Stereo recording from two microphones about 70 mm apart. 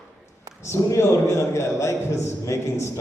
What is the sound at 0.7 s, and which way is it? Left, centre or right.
A man's voice, left.